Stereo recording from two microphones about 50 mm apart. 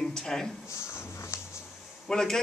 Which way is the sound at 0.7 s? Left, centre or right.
Left.